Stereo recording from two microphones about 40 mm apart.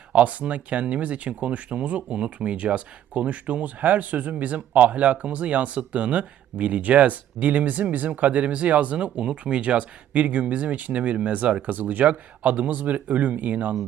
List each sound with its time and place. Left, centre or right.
0.1 s speech: right
11.7 s speech: right